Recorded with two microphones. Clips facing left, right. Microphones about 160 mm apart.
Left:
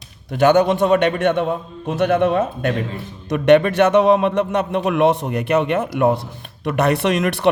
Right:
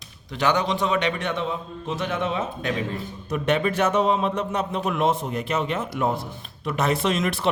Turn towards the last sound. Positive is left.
turn(degrees=65)  # may be behind; listen again after turning